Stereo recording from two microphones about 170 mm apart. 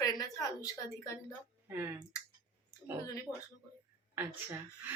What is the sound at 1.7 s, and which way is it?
Speech, 10° right (ahead or behind).